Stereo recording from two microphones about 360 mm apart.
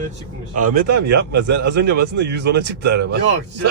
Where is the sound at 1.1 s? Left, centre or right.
Right.